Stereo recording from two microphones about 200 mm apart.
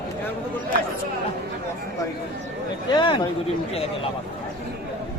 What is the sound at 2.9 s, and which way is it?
Speech, 25° left (ahead or behind).